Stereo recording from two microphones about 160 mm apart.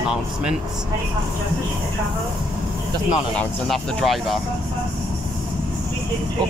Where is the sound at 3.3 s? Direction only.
Centre (ahead or behind).